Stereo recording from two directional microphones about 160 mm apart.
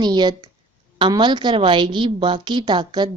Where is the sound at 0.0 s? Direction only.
25° right (ahead or behind).